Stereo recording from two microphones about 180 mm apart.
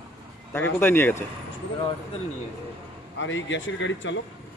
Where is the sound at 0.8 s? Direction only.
10° left (ahead or behind).